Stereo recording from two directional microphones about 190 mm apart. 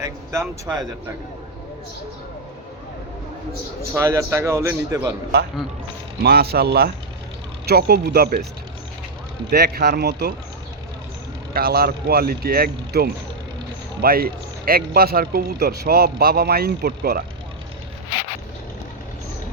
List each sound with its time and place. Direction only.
0.0 s speech: 15° right (ahead or behind)
3.9 s a man's voice: 15° right (ahead or behind)
6.2 s speech: 55° right (ahead or behind)
9.5 s speech: 55° right (ahead or behind)
11.5 s speech: 50° right (ahead or behind)